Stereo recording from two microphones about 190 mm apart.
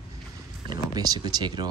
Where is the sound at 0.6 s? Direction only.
20° right (ahead or behind).